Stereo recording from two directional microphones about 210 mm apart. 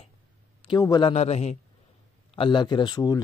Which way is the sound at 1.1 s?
30° left (ahead or behind).